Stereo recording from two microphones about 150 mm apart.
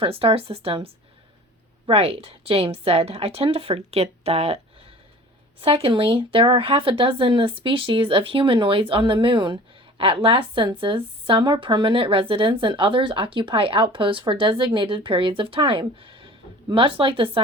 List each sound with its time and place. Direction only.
0.0 s speech: 40° right (ahead or behind)
1.9 s speech: 40° right (ahead or behind)